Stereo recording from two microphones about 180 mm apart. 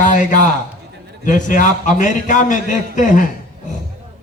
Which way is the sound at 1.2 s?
45° left (ahead or behind).